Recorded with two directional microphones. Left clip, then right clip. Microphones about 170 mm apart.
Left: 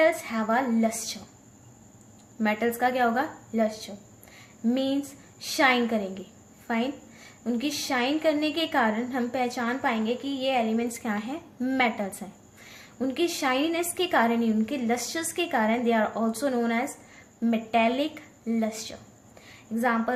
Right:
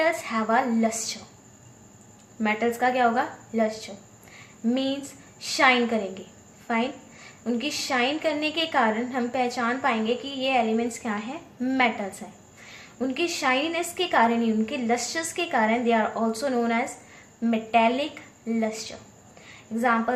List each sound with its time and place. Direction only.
0.0 s a woman's voice: 10° left (ahead or behind)
2.4 s a woman's voice: 20° left (ahead or behind)
4.4 s a sound: 15° left (ahead or behind)
5.4 s a woman's voice: 15° left (ahead or behind)